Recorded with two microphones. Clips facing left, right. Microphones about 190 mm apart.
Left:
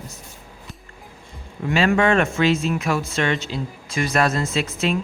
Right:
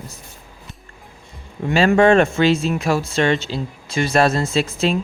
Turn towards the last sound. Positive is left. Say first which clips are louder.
# right 3 dB
turn(degrees=-30)  # may be behind; listen again after turning